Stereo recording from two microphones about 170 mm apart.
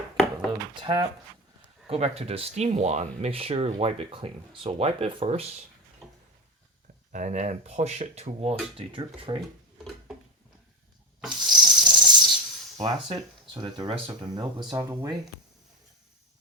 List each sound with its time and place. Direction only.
0.7 s speech: 30° right (ahead or behind)
6.0 s a sound: centre (ahead or behind)
7.1 s speech: 45° right (ahead or behind)
11.3 s rub: 25° right (ahead or behind)
12.7 s speech: 25° right (ahead or behind)